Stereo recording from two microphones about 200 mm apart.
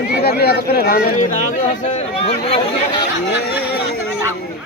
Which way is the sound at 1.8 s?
35° left (ahead or behind).